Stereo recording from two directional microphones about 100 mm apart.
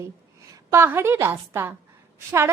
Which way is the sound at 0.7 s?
25° right (ahead or behind).